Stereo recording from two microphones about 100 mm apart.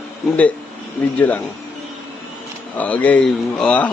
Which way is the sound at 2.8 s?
15° left (ahead or behind).